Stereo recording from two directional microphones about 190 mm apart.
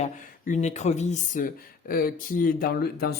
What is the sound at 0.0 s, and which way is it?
Speech, 40° left (ahead or behind).